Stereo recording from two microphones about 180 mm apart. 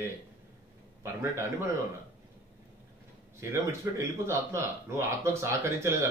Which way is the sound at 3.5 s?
15° right (ahead or behind).